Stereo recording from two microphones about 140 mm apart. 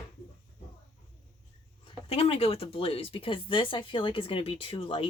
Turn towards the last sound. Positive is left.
turn(degrees=40)  # may be behind; listen again after turning